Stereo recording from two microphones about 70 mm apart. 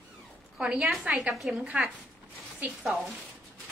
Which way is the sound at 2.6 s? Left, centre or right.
Right.